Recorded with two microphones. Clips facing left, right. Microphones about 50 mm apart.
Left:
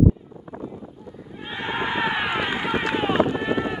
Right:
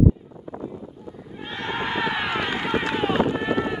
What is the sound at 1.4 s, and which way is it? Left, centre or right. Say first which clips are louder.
Run: left 1 dB; centre.